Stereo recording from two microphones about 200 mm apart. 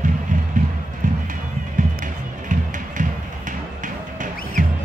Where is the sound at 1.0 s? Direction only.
40° right (ahead or behind).